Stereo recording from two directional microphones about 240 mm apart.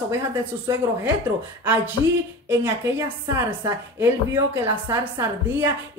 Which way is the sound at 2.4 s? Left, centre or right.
Centre.